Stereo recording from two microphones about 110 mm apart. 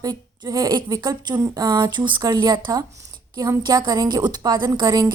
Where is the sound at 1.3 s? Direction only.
30° right (ahead or behind).